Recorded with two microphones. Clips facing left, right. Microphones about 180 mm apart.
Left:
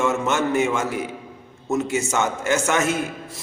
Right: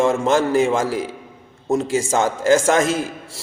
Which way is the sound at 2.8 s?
90° right.